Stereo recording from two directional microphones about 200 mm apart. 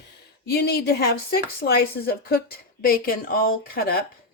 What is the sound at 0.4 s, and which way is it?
Speech, 55° left (ahead or behind).